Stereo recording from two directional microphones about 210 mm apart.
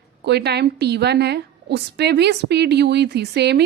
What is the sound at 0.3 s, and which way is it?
Speech, 50° right (ahead or behind).